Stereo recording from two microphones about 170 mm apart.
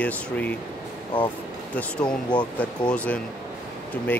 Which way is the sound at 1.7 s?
5° left (ahead or behind).